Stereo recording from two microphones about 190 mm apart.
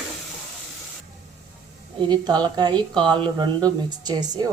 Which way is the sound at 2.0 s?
25° right (ahead or behind).